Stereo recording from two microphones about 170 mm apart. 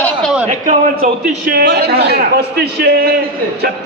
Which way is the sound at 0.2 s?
Centre (ahead or behind).